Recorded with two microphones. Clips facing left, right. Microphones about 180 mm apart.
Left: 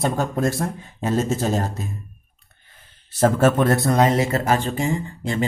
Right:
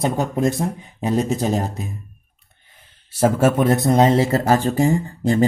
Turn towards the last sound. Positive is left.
turn(degrees=-40)  # may be behind; listen again after turning